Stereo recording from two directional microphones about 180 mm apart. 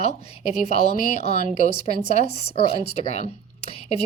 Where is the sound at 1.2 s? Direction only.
35° left (ahead or behind).